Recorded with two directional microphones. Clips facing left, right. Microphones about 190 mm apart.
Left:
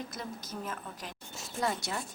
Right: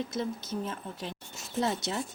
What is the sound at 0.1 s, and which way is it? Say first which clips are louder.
Speech: right 8 dB; 25° right (ahead or behind).